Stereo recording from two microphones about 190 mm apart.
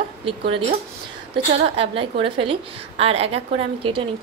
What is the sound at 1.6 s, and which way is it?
A woman's voice, 30° right (ahead or behind).